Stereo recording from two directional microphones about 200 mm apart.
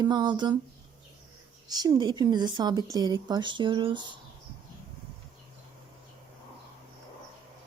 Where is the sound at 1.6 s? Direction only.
20° right (ahead or behind).